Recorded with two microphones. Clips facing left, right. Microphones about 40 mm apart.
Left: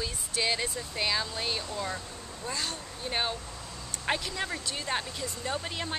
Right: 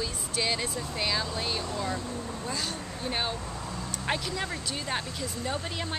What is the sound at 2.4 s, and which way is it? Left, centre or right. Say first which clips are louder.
Speech: left 2 dB; centre.